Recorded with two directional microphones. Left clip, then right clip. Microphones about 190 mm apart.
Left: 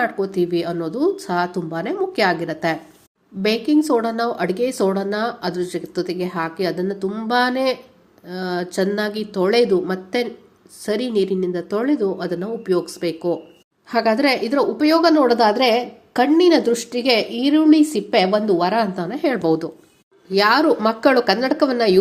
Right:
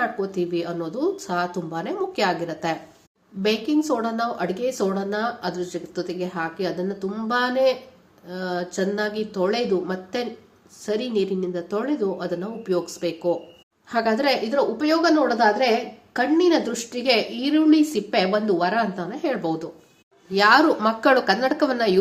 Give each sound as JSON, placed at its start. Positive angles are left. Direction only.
{"t": 0.0, "sound": "speech", "side_deg": 25}
{"t": 20.3, "sound": "speech", "side_deg": 20}